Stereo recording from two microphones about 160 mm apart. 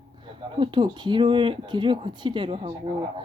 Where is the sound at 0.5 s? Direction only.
30° right (ahead or behind).